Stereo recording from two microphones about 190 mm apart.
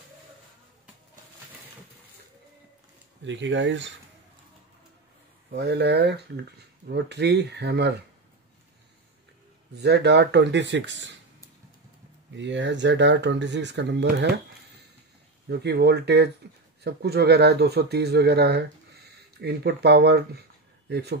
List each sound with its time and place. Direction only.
3.3 s speech: 70° right (ahead or behind)
5.5 s speech: 60° right (ahead or behind)
9.8 s speech: 60° right (ahead or behind)
12.4 s speech: 70° right (ahead or behind)
15.4 s speech: 60° right (ahead or behind)